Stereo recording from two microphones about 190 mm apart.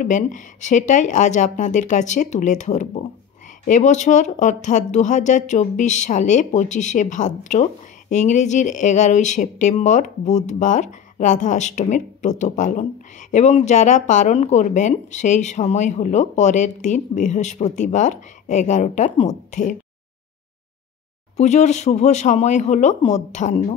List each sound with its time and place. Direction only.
0.0 s speech: 40° left (ahead or behind)
21.4 s speech: 35° left (ahead or behind)